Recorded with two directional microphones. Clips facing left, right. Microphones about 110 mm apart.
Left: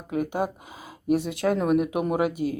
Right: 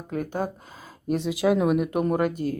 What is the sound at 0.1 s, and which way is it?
Speech, 10° left (ahead or behind).